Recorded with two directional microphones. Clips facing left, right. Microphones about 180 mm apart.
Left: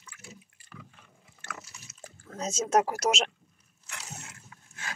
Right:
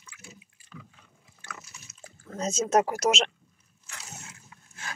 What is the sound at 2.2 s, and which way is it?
Speech, 5° left (ahead or behind).